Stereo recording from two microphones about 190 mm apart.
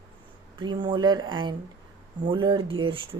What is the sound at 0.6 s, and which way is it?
Speech, 25° right (ahead or behind).